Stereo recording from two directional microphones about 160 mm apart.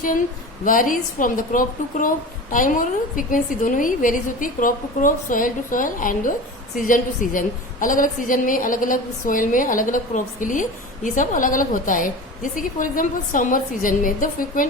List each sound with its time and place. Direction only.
0.6 s a woman's voice: 60° left (ahead or behind)